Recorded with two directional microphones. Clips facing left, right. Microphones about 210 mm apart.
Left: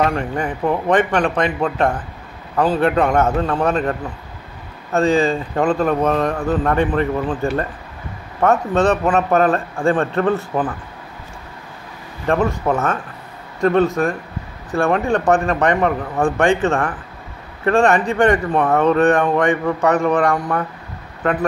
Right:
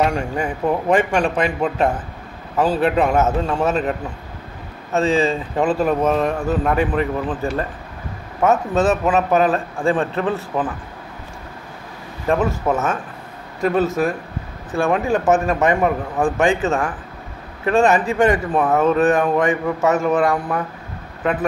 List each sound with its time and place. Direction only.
0.4 s a man's voice: 10° right (ahead or behind)
4.9 s speech: centre (ahead or behind)
12.3 s speech: 5° right (ahead or behind)
21.2 s speech: 15° right (ahead or behind)